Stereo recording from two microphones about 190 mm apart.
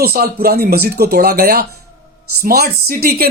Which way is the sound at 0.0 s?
50° right (ahead or behind).